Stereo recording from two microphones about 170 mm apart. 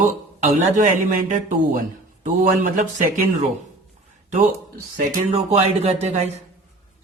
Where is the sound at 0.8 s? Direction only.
50° right (ahead or behind).